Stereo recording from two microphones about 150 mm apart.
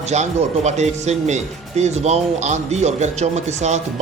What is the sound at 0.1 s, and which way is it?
Speech, 50° right (ahead or behind).